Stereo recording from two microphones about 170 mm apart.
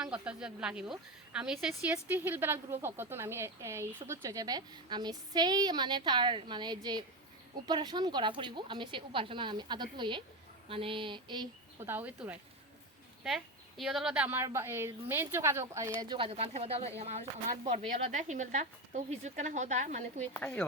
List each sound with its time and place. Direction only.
0.0 s a woman's voice: 5° right (ahead or behind); by 11.4 s 30° right (ahead or behind)
11.8 s a woman's voice: 10° right (ahead or behind); by 20.2 s 45° right (ahead or behind)
20.4 s speech: 5° left (ahead or behind)